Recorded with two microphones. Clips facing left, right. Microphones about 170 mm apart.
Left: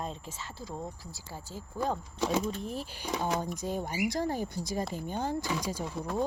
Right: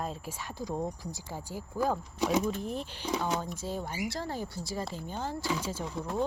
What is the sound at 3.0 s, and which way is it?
Speech, 15° left (ahead or behind).